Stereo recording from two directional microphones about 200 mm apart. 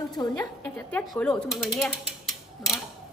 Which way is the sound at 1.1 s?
5° left (ahead or behind).